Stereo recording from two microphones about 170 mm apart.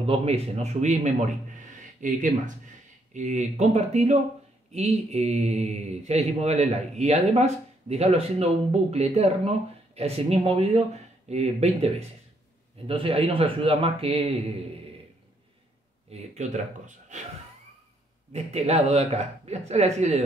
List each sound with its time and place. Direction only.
0.0 s a man's voice: 35° right (ahead or behind)
16.1 s speech: 45° right (ahead or behind)
18.3 s speech: 40° right (ahead or behind)